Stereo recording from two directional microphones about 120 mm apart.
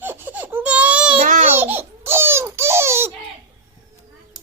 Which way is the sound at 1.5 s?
15° right (ahead or behind).